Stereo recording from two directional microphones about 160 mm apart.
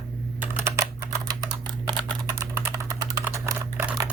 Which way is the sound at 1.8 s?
30° right (ahead or behind).